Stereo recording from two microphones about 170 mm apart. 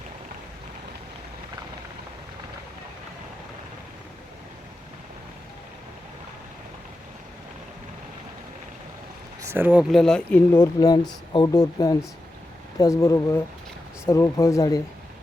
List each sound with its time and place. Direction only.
9.4 s speech: 15° right (ahead or behind)
9.9 s speech: 5° left (ahead or behind); by 14.8 s 20° left (ahead or behind)